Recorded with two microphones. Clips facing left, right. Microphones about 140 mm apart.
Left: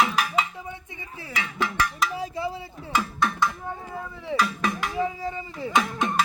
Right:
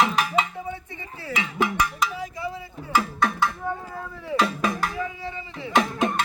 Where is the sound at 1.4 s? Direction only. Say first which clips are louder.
Right 2 dB; 15° right (ahead or behind).